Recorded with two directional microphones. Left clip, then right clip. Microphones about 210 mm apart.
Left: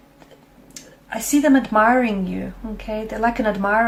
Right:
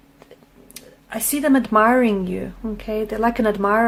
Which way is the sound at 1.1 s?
45° right (ahead or behind).